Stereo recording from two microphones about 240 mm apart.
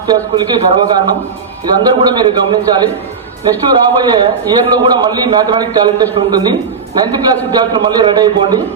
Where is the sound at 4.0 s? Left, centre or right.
Centre.